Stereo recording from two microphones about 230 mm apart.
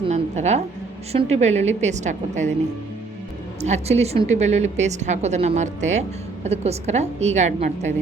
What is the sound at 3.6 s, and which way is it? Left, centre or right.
A woman's voice, right.